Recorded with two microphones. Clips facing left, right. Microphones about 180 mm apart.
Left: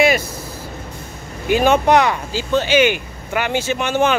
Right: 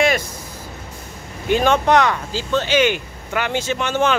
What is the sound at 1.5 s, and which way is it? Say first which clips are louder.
A man's voice: left 2 dB; 10° left (ahead or behind).